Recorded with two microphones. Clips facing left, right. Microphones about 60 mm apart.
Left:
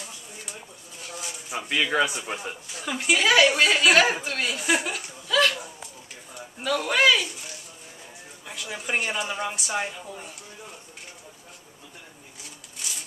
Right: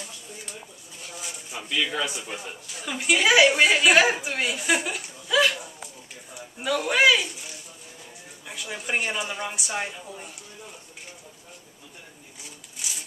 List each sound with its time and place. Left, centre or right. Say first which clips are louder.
1.7 s a man's voice: left 4 dB; left
2.7 s a woman's voice: even; centre
6.6 s speech: right 1 dB; centre
8.5 s a woman's voice: even; centre